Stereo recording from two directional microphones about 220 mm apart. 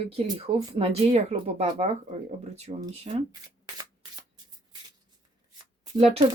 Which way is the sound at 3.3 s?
15° right (ahead or behind).